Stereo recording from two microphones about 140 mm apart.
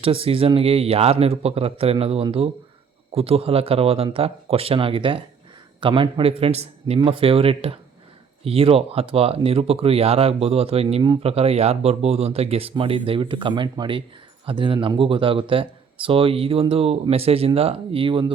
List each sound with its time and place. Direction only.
0.0 s speech: 40° right (ahead or behind)